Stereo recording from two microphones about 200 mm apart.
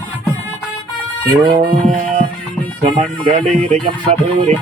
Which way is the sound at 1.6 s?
40° right (ahead or behind).